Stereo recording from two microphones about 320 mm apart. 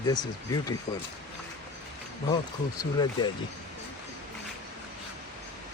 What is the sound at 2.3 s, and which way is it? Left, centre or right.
Speech, centre.